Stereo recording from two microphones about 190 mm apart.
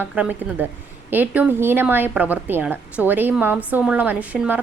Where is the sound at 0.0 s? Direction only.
10° right (ahead or behind).